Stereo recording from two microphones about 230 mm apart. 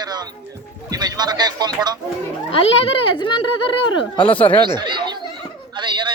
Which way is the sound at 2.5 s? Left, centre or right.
Left.